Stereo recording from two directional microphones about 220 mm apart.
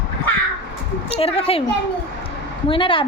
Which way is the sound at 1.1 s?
25° left (ahead or behind).